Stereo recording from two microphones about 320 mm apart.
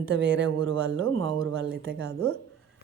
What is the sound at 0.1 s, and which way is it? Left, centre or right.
Speech, right.